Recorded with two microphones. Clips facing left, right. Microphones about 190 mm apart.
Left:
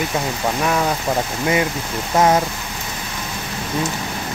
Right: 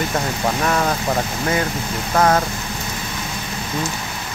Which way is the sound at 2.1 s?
20° left (ahead or behind).